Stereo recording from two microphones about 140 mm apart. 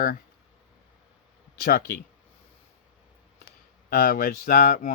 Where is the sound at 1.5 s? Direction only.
90° left.